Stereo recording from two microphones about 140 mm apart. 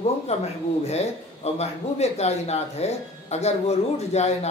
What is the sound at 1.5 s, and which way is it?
Speech, 50° left (ahead or behind).